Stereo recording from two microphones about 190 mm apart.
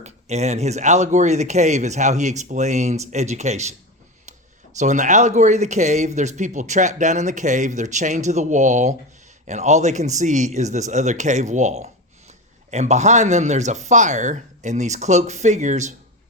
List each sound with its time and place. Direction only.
0.0 s speech: 35° right (ahead or behind)
4.8 s speech: 40° right (ahead or behind)